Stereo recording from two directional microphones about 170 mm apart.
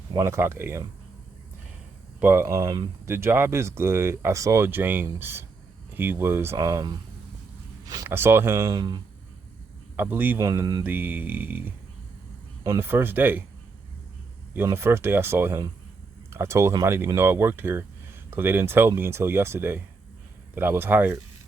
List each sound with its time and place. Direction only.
0.1 s speech: 15° right (ahead or behind)
2.2 s speech: 15° right (ahead or behind)
3.1 s speech: 15° right (ahead or behind)
10.0 s speech: 10° right (ahead or behind)
10.8 s speech: 10° right (ahead or behind)
14.5 s speech: 15° right (ahead or behind)